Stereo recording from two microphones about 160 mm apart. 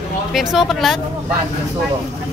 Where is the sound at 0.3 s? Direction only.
Centre (ahead or behind).